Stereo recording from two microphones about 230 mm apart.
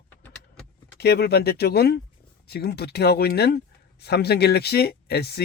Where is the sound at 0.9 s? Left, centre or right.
Left.